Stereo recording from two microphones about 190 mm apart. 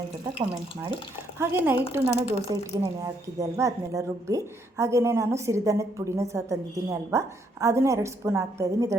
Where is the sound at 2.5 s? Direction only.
20° right (ahead or behind).